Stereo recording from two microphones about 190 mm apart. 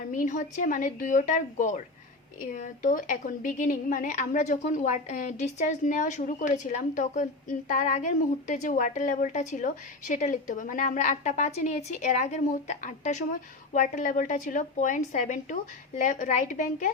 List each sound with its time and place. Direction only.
0.1 s a woman's voice: 40° left (ahead or behind)